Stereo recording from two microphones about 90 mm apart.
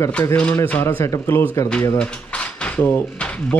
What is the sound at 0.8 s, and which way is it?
Speech, 30° left (ahead or behind).